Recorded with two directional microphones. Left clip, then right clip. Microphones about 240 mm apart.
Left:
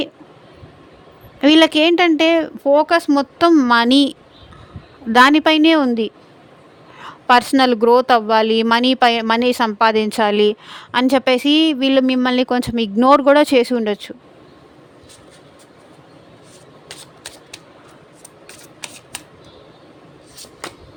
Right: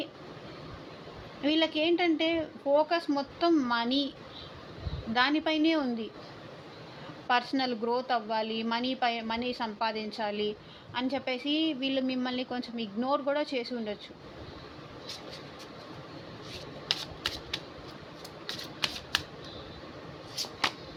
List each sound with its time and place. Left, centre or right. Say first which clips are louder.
1.4 s speech: left 16 dB; left
5.1 s speech: left 16 dB; left
7.3 s speech: left 16 dB; left
16.9 s shuffling cards: right 5 dB; centre